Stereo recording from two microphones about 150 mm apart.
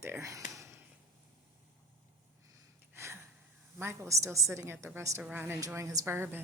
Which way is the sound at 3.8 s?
15° right (ahead or behind).